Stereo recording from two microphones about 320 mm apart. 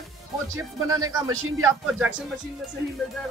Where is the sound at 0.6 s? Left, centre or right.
Centre.